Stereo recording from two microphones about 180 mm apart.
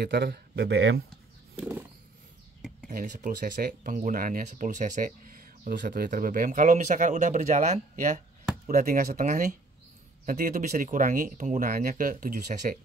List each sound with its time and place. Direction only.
0.0 s speech: 65° right (ahead or behind)
1.6 s wild animals: 10° right (ahead or behind)
2.9 s speech: 50° right (ahead or behind)